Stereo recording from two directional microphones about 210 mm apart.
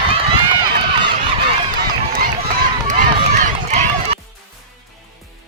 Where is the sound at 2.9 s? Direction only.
35° right (ahead or behind).